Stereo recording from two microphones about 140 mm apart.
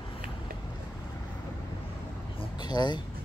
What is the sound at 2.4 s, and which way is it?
Vehicle, 30° left (ahead or behind).